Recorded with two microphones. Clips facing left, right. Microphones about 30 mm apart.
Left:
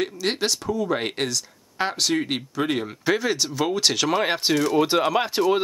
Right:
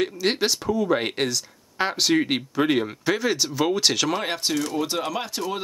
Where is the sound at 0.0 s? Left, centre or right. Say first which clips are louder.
Right 2 dB; centre.